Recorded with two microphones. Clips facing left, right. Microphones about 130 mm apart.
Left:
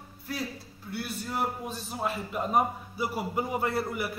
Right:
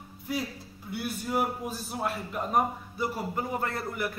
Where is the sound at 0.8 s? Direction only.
15° right (ahead or behind).